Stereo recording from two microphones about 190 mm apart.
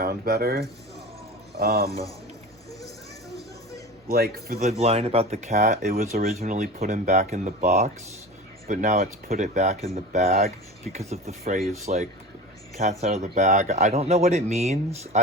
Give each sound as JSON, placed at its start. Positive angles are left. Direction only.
{"t": 0.0, "sound": "speech", "side_deg": -50}
{"t": 4.1, "sound": "a man's voice", "side_deg": -50}
{"t": 4.6, "sound": "speech", "side_deg": -35}